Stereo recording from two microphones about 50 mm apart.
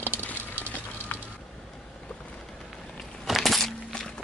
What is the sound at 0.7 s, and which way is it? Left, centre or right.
Vehicle, left.